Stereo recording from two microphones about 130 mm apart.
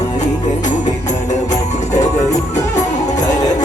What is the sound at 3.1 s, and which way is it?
Music, 30° left (ahead or behind).